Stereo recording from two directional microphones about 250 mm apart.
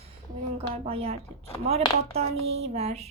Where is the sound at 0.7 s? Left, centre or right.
Right.